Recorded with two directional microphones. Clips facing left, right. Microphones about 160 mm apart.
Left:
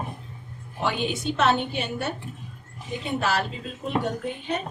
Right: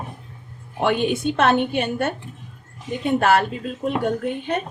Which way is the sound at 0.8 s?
55° right (ahead or behind).